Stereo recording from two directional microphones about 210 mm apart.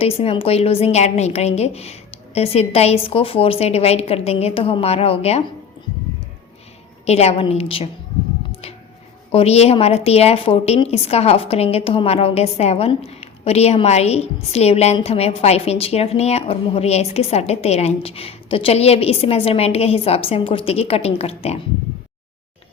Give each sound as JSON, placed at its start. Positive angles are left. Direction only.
{"t": 0.0, "sound": "a woman's voice", "side_deg": 25}
{"t": 7.0, "sound": "a woman's voice", "side_deg": 30}
{"t": 9.3, "sound": "a woman's voice", "side_deg": 30}